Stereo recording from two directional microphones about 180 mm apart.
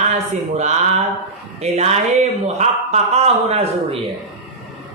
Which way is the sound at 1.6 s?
35° right (ahead or behind).